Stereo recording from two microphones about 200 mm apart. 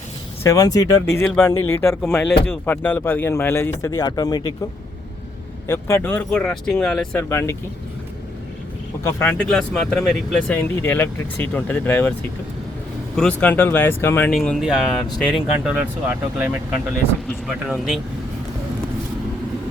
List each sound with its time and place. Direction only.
0.4 s speech: 15° left (ahead or behind)
5.6 s speech: 15° left (ahead or behind)
9.0 s speech: 10° left (ahead or behind)
13.1 s speech: 10° left (ahead or behind)
15.0 s speech: 20° left (ahead or behind)
15.6 s speech: 5° right (ahead or behind)